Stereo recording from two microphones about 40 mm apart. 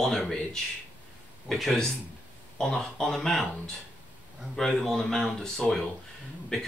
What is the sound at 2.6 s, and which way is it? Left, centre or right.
Speech, centre.